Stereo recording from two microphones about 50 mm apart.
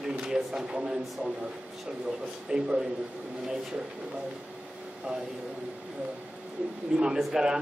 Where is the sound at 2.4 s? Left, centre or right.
Centre.